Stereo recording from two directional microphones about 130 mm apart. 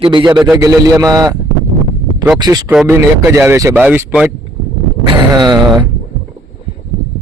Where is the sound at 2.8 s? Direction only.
20° right (ahead or behind).